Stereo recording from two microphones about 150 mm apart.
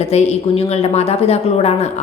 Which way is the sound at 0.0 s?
45° left (ahead or behind).